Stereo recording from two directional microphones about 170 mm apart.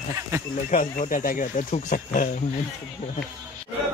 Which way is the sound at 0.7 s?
55° left (ahead or behind).